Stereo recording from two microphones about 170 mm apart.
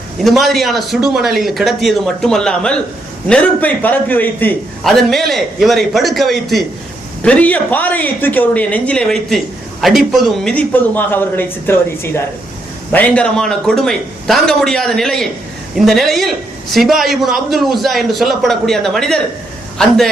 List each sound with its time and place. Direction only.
0.3 s a man's voice: centre (ahead or behind)